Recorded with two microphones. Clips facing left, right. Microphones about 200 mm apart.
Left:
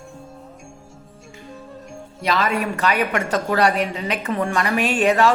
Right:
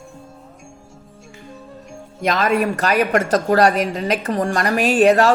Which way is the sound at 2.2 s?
45° right (ahead or behind).